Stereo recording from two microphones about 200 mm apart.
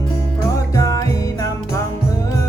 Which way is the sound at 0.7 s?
15° left (ahead or behind).